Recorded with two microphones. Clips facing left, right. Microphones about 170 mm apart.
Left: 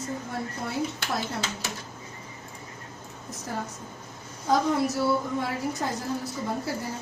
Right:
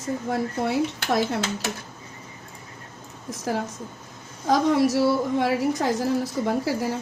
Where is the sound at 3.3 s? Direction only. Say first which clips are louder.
Right 7 dB; 90° right.